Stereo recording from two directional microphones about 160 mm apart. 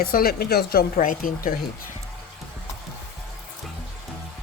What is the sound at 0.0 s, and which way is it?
Speech, 70° left (ahead or behind).